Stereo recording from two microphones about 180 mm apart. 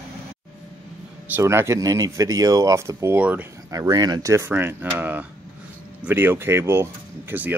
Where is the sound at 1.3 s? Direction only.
15° right (ahead or behind).